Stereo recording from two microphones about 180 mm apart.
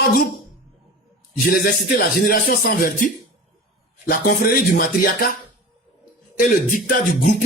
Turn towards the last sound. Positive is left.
turn(degrees=50)  # may be behind; listen again after turning